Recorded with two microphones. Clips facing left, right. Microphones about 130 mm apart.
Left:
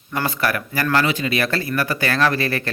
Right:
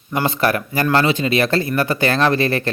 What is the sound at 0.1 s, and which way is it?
Speech, 20° right (ahead or behind).